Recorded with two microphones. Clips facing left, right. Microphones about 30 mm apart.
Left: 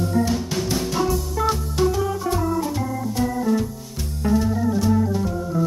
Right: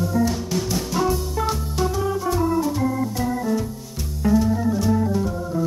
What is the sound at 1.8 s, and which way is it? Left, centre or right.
Organ, centre.